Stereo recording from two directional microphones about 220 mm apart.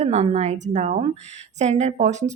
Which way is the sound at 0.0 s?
30° right (ahead or behind).